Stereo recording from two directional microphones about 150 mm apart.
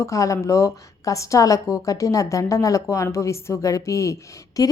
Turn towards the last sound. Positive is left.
turn(degrees=20)  # may be behind; listen again after turning